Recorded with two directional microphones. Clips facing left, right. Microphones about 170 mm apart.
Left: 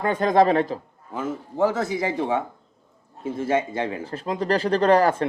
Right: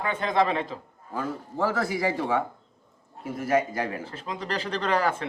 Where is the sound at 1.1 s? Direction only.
20° left (ahead or behind).